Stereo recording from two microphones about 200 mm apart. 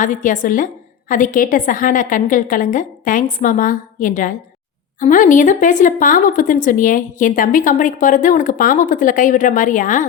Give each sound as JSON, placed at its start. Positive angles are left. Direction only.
{"t": 0.0, "sound": "a woman's voice", "side_deg": 40}